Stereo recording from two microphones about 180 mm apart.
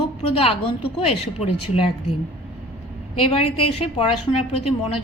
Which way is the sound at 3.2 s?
35° left (ahead or behind).